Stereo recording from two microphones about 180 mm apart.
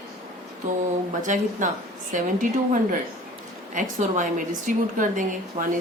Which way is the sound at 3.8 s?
45° right (ahead or behind).